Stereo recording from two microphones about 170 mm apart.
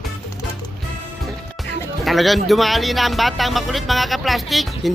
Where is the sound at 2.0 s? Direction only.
Centre (ahead or behind).